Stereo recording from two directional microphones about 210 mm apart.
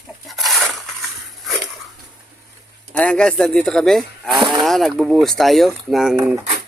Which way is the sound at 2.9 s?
5° left (ahead or behind).